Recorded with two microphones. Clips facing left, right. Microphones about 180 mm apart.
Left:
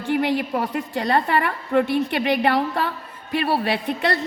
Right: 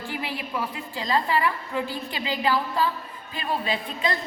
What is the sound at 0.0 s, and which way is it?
A woman's voice, 70° left (ahead or behind).